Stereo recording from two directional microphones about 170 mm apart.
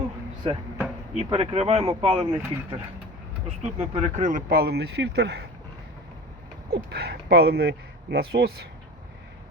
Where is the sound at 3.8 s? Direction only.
45° right (ahead or behind); by 5.4 s 90° right.